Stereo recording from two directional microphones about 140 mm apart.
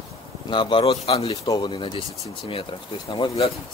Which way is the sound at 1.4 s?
30° left (ahead or behind).